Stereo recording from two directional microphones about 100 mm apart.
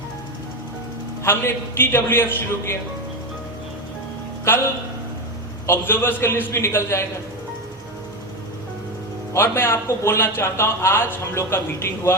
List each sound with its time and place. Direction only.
1.2 s a man's voice: 25° left (ahead or behind)
5.6 s a man's voice: 20° left (ahead or behind)
9.3 s a man's voice: 25° left (ahead or behind)